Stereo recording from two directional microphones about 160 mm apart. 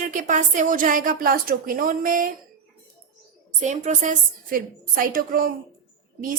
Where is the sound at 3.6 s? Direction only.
45° right (ahead or behind).